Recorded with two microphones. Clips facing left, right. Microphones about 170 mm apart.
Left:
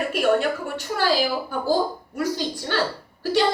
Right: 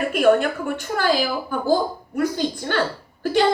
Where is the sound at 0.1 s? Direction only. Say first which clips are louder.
Right 5 dB; 50° right (ahead or behind).